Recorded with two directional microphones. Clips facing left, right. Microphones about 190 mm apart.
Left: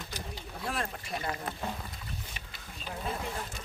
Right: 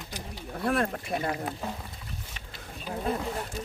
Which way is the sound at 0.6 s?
55° right (ahead or behind).